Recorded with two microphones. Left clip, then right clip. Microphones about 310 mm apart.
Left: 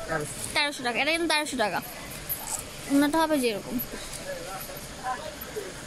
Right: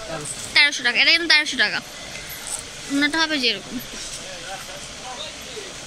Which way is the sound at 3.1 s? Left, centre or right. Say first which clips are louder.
Right 4 dB; centre.